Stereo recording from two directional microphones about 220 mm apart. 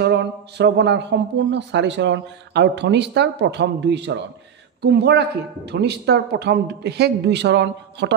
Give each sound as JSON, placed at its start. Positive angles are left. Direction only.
{"t": 0.0, "sound": "a man's voice", "side_deg": -50}